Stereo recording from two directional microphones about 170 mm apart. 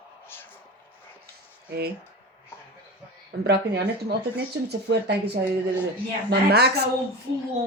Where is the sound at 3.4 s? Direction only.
70° right (ahead or behind).